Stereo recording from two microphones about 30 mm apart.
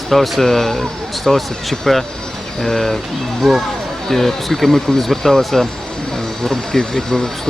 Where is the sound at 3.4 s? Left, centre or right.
Centre.